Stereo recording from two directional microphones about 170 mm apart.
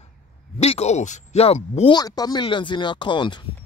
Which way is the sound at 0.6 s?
40° left (ahead or behind).